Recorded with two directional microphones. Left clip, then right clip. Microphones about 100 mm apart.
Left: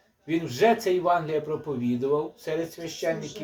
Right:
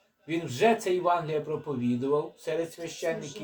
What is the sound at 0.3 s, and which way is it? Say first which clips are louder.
A man's voice: left 3 dB; 10° left (ahead or behind).